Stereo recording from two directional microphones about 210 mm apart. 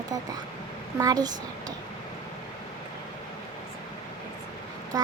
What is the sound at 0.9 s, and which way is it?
Speech, 15° right (ahead or behind).